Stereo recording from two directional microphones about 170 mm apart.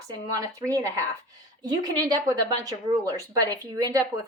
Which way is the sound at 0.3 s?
20° right (ahead or behind).